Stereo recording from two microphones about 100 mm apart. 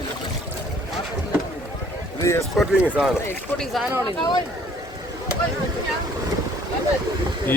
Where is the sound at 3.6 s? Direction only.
Centre (ahead or behind).